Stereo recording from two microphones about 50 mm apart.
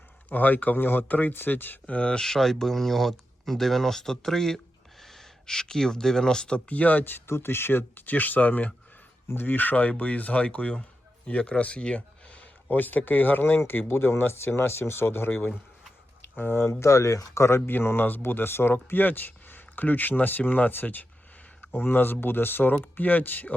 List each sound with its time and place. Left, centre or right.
0.3 s speech: left
1.9 s speech: left
2.1 s speech: centre
6.7 s speech: left
7.3 s speech: left
9.3 s speech: left
12.7 s speech: left
16.8 s speech: left
17.7 s speech: left